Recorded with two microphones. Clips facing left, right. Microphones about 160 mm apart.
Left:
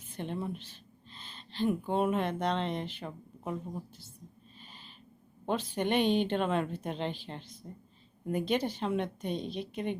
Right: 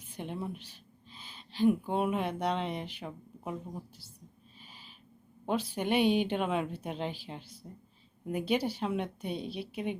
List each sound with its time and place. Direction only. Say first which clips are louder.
0.1 s speech: left 2 dB; 10° right (ahead or behind)
4.6 s owl: left 1 dB; 5° right (ahead or behind)
5.5 s a woman's voice: even; 10° right (ahead or behind)